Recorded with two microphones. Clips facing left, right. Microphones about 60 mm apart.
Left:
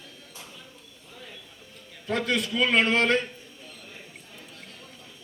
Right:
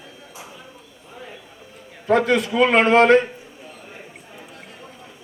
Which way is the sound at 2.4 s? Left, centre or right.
Right.